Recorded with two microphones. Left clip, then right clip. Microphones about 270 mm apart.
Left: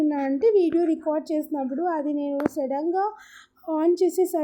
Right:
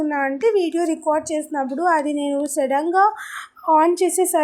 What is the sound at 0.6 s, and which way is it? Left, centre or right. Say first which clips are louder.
Speech: right 1 dB; centre.